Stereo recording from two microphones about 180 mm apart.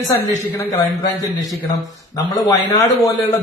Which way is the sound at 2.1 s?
20° left (ahead or behind).